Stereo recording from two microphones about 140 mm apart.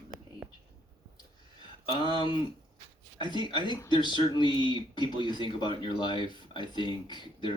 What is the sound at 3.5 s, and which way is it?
Speech, 35° left (ahead or behind).